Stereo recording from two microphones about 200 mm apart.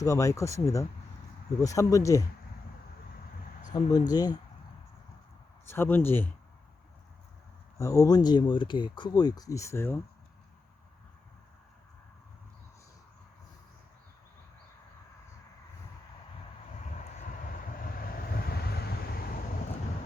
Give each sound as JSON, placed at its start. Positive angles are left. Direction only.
{"t": 0.0, "sound": "speech", "side_deg": 15}
{"t": 3.7, "sound": "speech", "side_deg": 20}
{"t": 5.6, "sound": "speech", "side_deg": 10}
{"t": 7.8, "sound": "speech", "side_deg": 15}
{"t": 16.9, "sound": "vehicle", "side_deg": 40}